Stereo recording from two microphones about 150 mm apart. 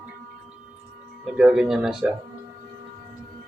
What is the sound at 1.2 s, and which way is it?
Speech, 5° right (ahead or behind).